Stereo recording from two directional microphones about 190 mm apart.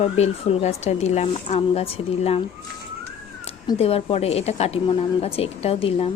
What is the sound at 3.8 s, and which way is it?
Speech, 30° left (ahead or behind).